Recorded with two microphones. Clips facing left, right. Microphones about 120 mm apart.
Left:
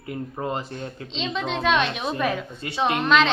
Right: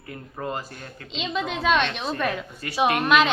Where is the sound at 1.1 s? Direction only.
5° right (ahead or behind).